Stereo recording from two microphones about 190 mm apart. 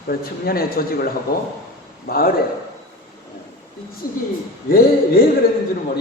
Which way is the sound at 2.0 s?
50° left (ahead or behind).